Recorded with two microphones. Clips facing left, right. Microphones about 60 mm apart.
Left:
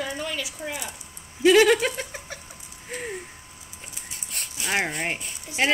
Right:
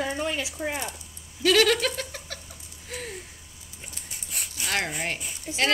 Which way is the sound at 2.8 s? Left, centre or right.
Left.